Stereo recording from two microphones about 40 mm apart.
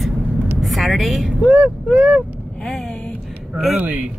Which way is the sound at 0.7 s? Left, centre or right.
Centre.